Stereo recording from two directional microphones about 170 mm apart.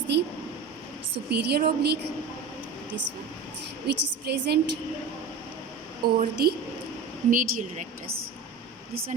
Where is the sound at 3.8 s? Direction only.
75° right (ahead or behind).